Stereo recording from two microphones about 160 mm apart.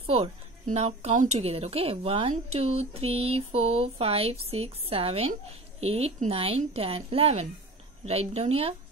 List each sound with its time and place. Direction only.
0.0 s a woman's voice: 40° right (ahead or behind)